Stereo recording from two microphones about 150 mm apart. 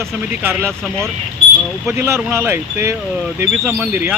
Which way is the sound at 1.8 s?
15° right (ahead or behind).